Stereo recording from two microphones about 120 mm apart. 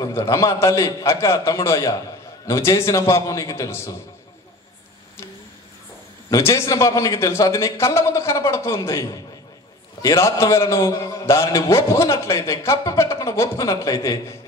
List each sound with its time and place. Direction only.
0.0 s a man's voice: 30° left (ahead or behind)
6.3 s a man's voice: 25° left (ahead or behind)